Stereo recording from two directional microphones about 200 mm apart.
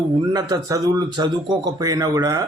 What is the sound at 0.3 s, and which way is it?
Speech, 20° right (ahead or behind).